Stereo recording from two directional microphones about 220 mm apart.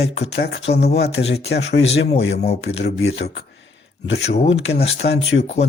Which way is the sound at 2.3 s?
30° left (ahead or behind).